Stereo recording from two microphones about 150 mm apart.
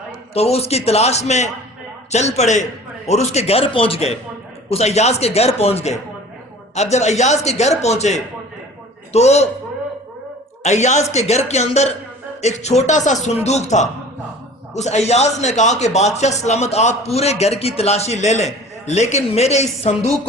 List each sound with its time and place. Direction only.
0.3 s a man's voice: 45° left (ahead or behind)
10.6 s a man's voice: 50° left (ahead or behind)